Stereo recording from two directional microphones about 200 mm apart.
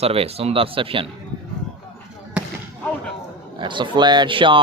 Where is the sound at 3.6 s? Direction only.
25° right (ahead or behind).